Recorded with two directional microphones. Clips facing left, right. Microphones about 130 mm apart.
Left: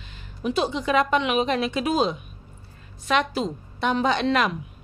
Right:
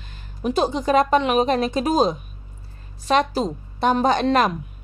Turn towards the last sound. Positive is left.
turn(degrees=-40)  # may be behind; listen again after turning